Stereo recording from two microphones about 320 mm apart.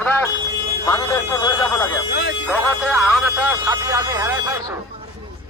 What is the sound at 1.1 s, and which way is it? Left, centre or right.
Speech, centre.